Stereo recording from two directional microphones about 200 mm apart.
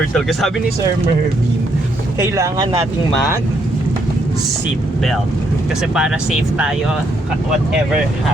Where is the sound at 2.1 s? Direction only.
15° right (ahead or behind).